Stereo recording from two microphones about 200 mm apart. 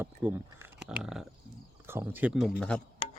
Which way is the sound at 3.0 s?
25° left (ahead or behind).